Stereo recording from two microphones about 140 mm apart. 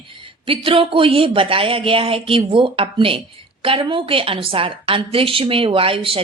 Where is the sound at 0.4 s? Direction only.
40° right (ahead or behind).